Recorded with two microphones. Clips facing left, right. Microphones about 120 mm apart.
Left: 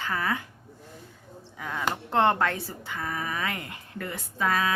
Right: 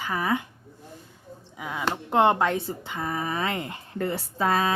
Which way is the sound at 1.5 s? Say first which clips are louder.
Right 1 dB; 10° right (ahead or behind).